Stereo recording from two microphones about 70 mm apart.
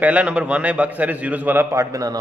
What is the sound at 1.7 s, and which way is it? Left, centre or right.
Speech, right.